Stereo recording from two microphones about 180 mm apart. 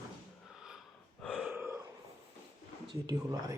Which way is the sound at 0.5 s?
Centre (ahead or behind).